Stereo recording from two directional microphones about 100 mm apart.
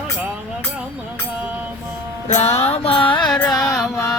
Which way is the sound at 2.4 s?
90° left.